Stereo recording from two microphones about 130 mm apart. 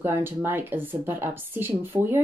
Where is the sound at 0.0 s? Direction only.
15° right (ahead or behind).